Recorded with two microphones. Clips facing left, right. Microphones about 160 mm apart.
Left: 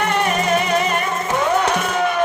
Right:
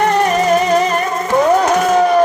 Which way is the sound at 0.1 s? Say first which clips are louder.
Right 5 dB; 35° right (ahead or behind).